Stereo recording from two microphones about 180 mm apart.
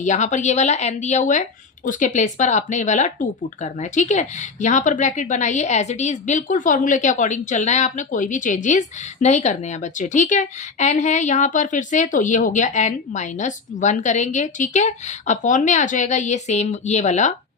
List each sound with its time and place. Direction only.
0.0 s a woman's voice: 40° left (ahead or behind)